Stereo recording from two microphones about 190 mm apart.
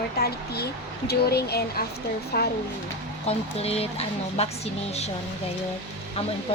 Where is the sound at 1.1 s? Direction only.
55° left (ahead or behind).